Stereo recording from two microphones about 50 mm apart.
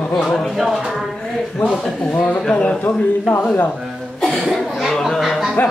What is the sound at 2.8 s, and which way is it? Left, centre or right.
Speech, left.